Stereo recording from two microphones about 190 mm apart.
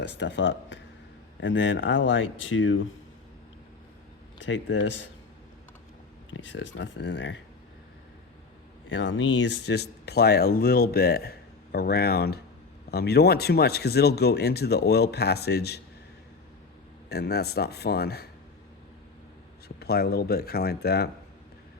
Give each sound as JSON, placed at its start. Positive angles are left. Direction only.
{"t": 0.0, "sound": "speech", "side_deg": 65}
{"t": 4.4, "sound": "speech", "side_deg": 75}
{"t": 6.3, "sound": "speech", "side_deg": 75}
{"t": 8.9, "sound": "speech", "side_deg": 80}
{"t": 17.1, "sound": "speech", "side_deg": 60}
{"t": 19.6, "sound": "speech", "side_deg": 55}